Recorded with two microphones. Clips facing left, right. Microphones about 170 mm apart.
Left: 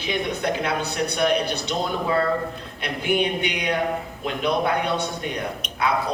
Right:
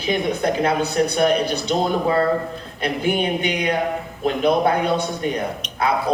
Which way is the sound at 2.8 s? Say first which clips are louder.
Right 2 dB; 45° right (ahead or behind).